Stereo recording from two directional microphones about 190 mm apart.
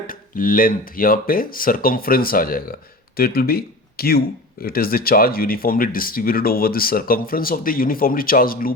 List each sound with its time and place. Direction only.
0.1 s speech: 45° left (ahead or behind)